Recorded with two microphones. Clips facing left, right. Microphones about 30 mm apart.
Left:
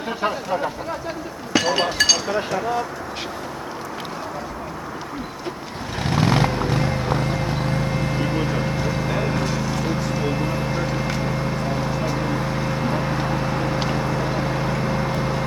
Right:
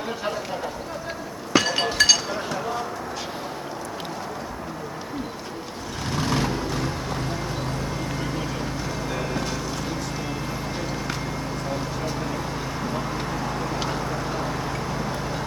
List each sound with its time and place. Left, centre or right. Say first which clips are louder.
0.2 s speech: left 5 dB; left
1.5 s chink: left 1 dB; centre
6.1 s vehicle: left 5 dB; left
9.0 s vehicle: left 3 dB; left
12.8 s vehicle: left 4 dB; left
13.7 s vehicle: left 4 dB; left
14.1 s vehicle: left 4 dB; left